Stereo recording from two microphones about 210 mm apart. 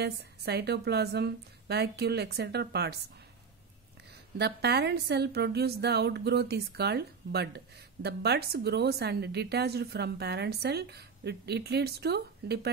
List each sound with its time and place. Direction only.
0.0 s a woman's voice: 50° right (ahead or behind)
4.4 s a woman's voice: 50° right (ahead or behind)